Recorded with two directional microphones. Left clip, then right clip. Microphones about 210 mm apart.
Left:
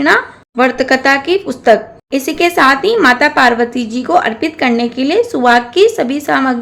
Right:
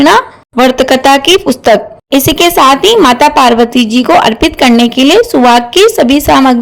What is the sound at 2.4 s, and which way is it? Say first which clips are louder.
A woman's voice: right 4 dB; 30° right (ahead or behind).